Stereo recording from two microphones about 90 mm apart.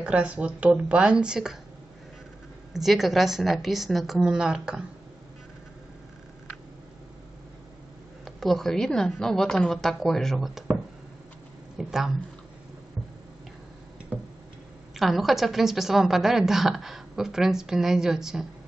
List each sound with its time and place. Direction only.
0.0 s speech: 15° right (ahead or behind)
2.7 s a woman's voice: centre (ahead or behind)
8.4 s a woman's voice: centre (ahead or behind)
11.8 s a woman's voice: 5° right (ahead or behind)
15.0 s a woman's voice: centre (ahead or behind)